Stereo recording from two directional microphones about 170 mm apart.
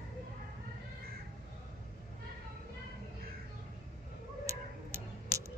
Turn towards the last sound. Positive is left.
turn(degrees=-15)  # may be behind; listen again after turning